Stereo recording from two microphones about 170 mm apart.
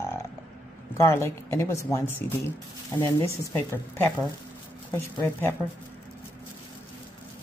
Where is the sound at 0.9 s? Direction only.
15° left (ahead or behind).